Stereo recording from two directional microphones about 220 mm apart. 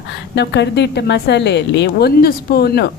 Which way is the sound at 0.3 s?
50° left (ahead or behind).